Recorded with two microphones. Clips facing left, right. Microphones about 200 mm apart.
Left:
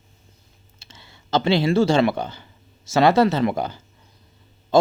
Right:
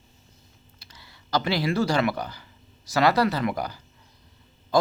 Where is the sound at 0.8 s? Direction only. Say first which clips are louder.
Left 4 dB; 25° left (ahead or behind).